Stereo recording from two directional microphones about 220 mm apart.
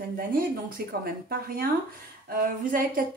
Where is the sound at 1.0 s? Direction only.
45° right (ahead or behind).